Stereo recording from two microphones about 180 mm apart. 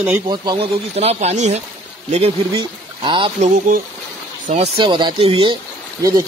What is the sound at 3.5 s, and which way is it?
Speech, 45° right (ahead or behind).